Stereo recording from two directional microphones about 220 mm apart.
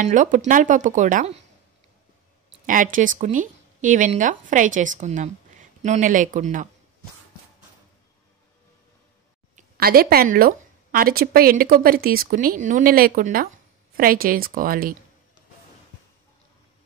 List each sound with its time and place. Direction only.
0.0 s a woman's voice: 35° right (ahead or behind)
2.6 s speech: 35° right (ahead or behind)
9.6 s a woman's voice: 45° right (ahead or behind)